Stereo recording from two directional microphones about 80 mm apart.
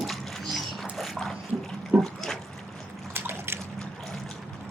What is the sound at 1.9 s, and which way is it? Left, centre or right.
Pig, centre.